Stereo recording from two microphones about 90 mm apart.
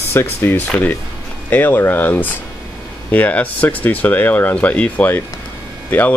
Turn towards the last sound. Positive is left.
turn(degrees=20)  # may be behind; listen again after turning